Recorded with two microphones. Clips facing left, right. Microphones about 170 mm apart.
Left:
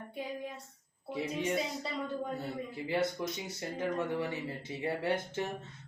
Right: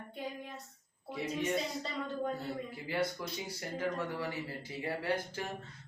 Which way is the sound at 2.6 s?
25° left (ahead or behind).